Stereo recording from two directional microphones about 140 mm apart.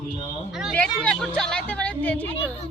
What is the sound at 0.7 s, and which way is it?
A woman's voice, 5° left (ahead or behind).